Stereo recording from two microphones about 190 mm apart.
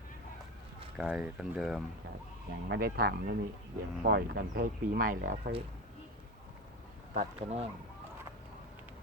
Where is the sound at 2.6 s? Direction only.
60° right (ahead or behind).